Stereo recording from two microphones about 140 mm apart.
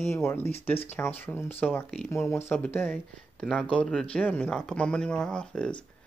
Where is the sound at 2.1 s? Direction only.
20° left (ahead or behind).